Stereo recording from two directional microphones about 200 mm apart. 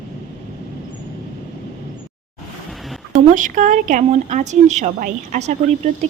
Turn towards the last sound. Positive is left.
turn(degrees=-35)  # may be behind; listen again after turning